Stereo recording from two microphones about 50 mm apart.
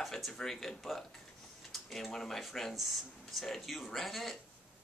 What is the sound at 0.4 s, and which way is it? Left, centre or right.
Speech, centre.